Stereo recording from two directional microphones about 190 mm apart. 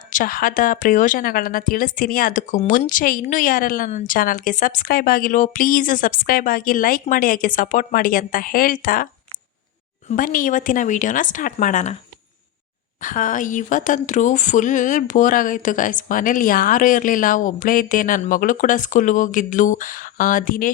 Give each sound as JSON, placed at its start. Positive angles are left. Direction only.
{"t": 0.1, "sound": "a woman's voice", "side_deg": 45}
{"t": 10.1, "sound": "a woman's voice", "side_deg": 45}
{"t": 13.0, "sound": "a woman's voice", "side_deg": 45}